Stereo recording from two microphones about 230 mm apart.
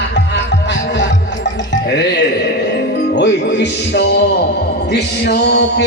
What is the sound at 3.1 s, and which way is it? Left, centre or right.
Music, left.